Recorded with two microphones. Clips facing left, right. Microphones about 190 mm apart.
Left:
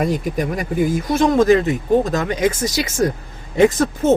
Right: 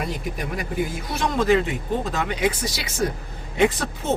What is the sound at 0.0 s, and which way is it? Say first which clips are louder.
Speech: left 9 dB; 45° left (ahead or behind).